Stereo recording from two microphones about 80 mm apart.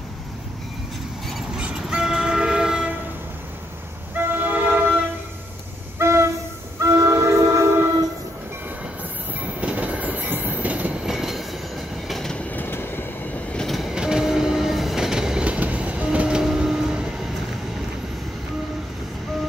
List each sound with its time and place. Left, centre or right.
1.6 s train: centre
4.1 s train: right
5.9 s train: right
9.6 s train: centre
11.1 s train: centre
12.4 s train: left
13.7 s train: centre